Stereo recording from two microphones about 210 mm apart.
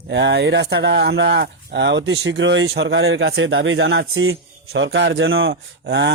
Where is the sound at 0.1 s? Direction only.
55° right (ahead or behind).